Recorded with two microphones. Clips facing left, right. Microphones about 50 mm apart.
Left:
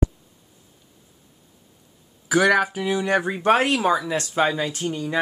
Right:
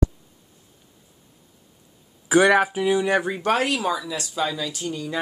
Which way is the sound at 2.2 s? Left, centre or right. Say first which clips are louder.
Right 1 dB; right.